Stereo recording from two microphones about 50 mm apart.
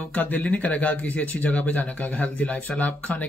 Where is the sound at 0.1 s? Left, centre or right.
Left.